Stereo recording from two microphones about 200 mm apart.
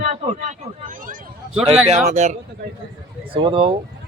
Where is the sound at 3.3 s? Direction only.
25° right (ahead or behind).